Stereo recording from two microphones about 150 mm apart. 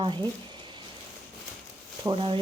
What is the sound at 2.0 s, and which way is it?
Speech, 35° right (ahead or behind).